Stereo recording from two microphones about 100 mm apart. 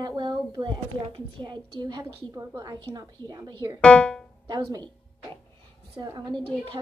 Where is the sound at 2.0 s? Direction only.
35° right (ahead or behind).